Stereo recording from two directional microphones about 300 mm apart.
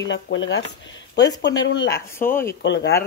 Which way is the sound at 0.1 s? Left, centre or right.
Left.